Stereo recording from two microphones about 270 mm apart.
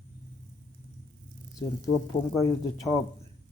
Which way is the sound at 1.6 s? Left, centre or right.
Centre.